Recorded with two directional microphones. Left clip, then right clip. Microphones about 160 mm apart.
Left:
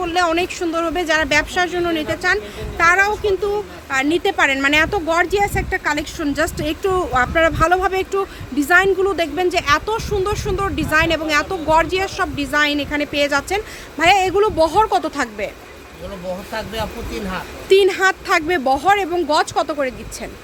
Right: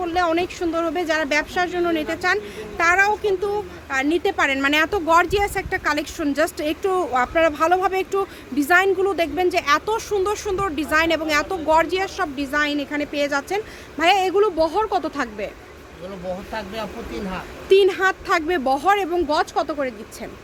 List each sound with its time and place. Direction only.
0.0 s a woman's voice: 5° left (ahead or behind)
16.5 s speech: 25° left (ahead or behind)
17.7 s speech: 5° left (ahead or behind)